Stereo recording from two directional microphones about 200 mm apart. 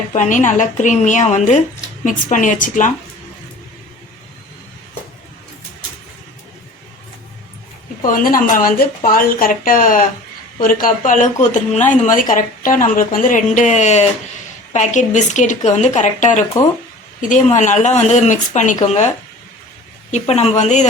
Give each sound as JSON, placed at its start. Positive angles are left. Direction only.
{"t": 0.1, "sound": "a woman's voice", "side_deg": 40}
{"t": 8.0, "sound": "a woman's voice", "side_deg": 45}
{"t": 20.1, "sound": "a woman's voice", "side_deg": 35}